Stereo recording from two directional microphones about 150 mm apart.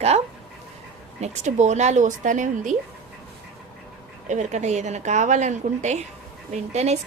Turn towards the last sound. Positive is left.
turn(degrees=-45)  # may be behind; listen again after turning